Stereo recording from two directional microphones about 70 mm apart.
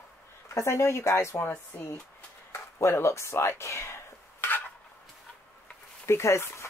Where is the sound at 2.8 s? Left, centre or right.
Left.